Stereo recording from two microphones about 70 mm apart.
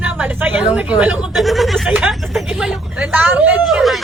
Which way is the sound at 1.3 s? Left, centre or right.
Centre.